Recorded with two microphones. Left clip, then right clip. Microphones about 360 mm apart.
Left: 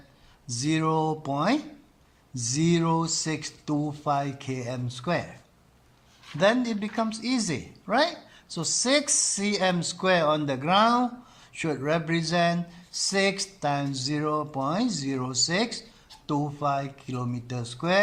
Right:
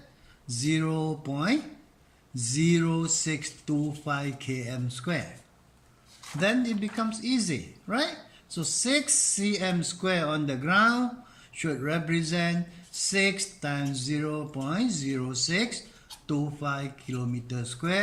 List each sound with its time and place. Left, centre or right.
0.4 s speech: centre
6.4 s speech: centre